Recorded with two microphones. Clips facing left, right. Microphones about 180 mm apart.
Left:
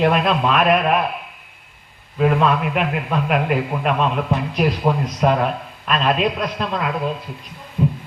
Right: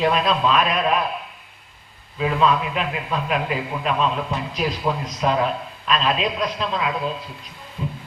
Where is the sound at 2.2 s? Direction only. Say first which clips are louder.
Left 3 dB; 55° left (ahead or behind).